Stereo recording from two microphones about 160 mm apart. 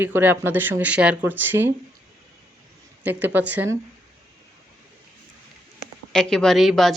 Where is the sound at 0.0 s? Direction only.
10° right (ahead or behind).